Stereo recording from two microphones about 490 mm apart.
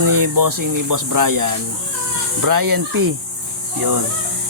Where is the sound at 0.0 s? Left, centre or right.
Right.